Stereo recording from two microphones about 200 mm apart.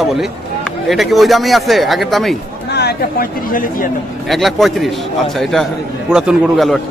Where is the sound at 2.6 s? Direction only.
55° left (ahead or behind).